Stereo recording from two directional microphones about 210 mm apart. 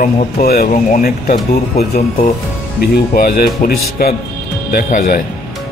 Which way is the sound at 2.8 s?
45° left (ahead or behind).